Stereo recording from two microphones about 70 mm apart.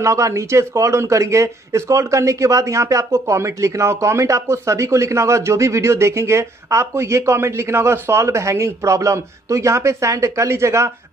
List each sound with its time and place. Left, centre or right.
0.0 s a man's voice: right